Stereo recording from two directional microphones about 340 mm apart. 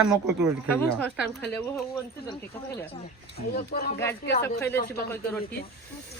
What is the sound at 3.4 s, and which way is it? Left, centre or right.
Speech, left.